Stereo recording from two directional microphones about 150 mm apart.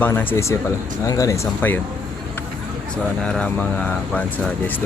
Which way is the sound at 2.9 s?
5° left (ahead or behind).